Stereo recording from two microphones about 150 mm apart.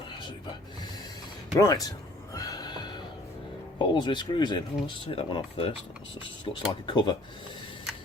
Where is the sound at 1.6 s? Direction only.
25° left (ahead or behind).